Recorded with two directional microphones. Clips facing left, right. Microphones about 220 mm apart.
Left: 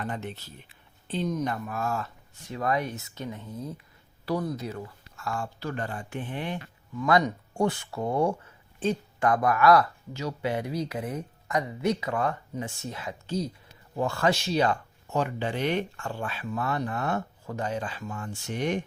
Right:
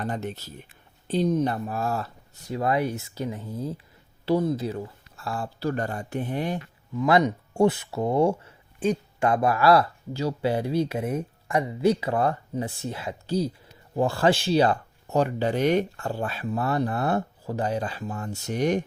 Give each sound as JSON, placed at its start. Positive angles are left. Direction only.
{"t": 0.0, "sound": "speech", "side_deg": -40}
{"t": 7.0, "sound": "speech", "side_deg": -20}